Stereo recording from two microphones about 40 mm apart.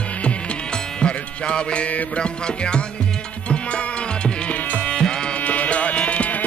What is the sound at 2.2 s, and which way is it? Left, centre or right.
Music, left.